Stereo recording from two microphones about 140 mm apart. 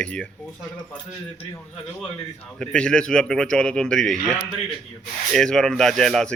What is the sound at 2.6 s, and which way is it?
Speech, 5° left (ahead or behind).